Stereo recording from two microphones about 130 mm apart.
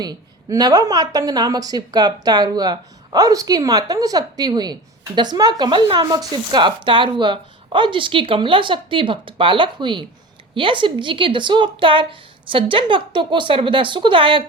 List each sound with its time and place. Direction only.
0.0 s speech: 30° right (ahead or behind)